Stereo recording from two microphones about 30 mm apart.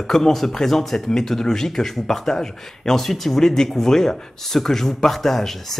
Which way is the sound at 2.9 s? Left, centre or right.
Centre.